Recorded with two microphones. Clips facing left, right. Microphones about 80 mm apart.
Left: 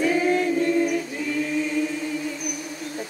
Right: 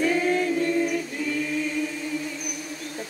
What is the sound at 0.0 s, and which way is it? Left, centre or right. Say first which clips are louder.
A capella: left 2 dB; centre.